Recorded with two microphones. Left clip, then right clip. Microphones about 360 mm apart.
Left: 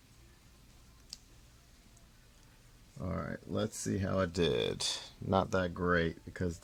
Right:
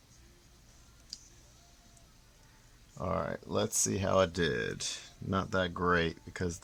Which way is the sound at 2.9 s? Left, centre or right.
Centre.